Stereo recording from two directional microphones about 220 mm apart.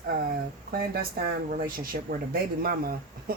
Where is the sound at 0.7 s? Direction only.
45° right (ahead or behind).